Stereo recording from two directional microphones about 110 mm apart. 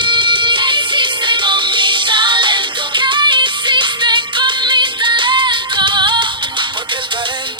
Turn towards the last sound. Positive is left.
turn(degrees=-45)  # may be behind; listen again after turning